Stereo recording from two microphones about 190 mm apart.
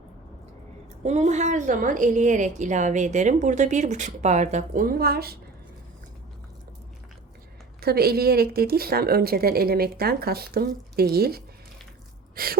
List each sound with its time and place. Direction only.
1.0 s a woman's voice: 35° right (ahead or behind); by 5.4 s 55° right (ahead or behind)
7.8 s a woman's voice: 55° right (ahead or behind)